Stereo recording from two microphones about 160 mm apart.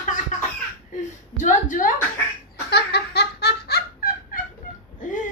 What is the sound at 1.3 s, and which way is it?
Speech, 50° left (ahead or behind).